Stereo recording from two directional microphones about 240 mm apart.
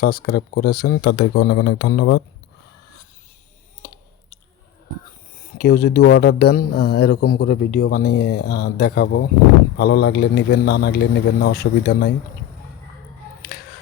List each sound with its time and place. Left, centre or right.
0.0 s speech: left
5.5 s a man's voice: left